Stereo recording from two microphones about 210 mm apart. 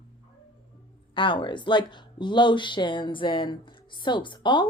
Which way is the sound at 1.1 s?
25° left (ahead or behind).